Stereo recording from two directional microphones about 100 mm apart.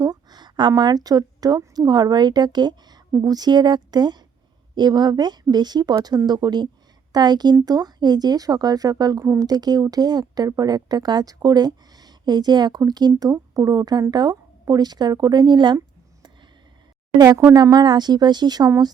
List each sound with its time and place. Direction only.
0.0 s a sound: 45° right (ahead or behind)
0.8 s speech: 45° right (ahead or behind)
17.2 s speech: 30° right (ahead or behind)